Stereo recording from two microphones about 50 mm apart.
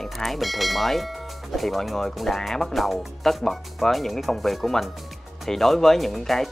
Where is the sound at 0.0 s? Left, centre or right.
Centre.